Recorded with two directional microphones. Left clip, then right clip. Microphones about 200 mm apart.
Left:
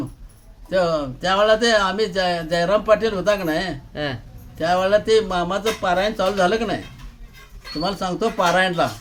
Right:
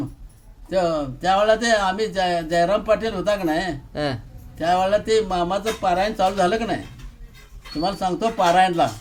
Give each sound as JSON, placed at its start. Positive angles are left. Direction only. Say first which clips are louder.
{"t": 0.7, "sound": "speech", "louder": "left 2 dB", "side_deg": 10}
{"t": 3.9, "sound": "speech", "louder": "right 2 dB", "side_deg": -15}
{"t": 4.5, "sound": "speech", "louder": "left 1 dB", "side_deg": 5}